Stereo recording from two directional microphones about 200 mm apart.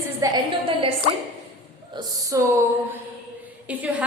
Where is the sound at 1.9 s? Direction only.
15° right (ahead or behind).